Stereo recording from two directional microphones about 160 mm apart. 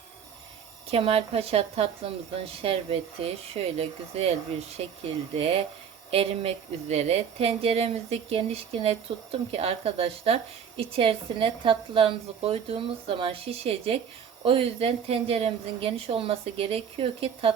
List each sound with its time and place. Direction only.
0.9 s a woman's voice: 35° right (ahead or behind)
6.1 s a woman's voice: 35° right (ahead or behind)